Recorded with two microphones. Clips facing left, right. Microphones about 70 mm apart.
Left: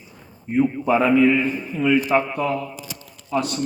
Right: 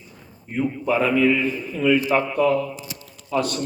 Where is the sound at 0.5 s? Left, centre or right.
Centre.